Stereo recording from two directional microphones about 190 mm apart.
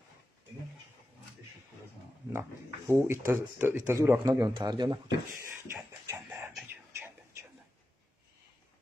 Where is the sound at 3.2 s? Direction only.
15° right (ahead or behind).